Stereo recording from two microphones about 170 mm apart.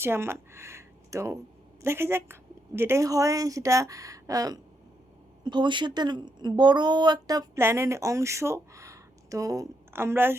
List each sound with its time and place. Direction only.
0.0 s a woman's voice: 15° right (ahead or behind)